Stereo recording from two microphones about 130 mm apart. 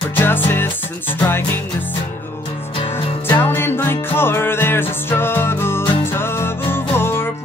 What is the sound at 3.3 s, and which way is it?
Music, 15° left (ahead or behind).